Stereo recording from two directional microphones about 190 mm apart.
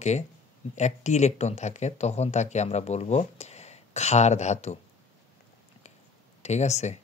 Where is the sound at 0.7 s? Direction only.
40° left (ahead or behind).